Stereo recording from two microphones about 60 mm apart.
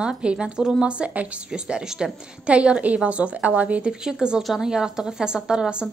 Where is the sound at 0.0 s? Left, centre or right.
Centre.